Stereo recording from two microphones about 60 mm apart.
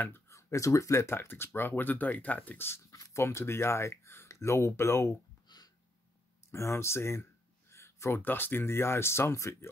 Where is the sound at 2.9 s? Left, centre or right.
Left.